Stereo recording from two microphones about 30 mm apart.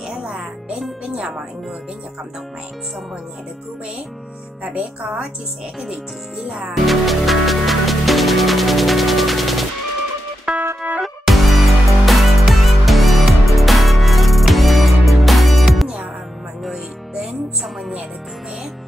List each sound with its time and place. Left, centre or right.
0.1 s music: right
1.0 s speech: right
4.6 s speech: right
6.7 s music: centre
10.5 s music: right
11.2 s music: centre
16.7 s music: centre